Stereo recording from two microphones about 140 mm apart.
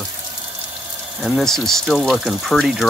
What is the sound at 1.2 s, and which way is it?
Speech, centre (ahead or behind).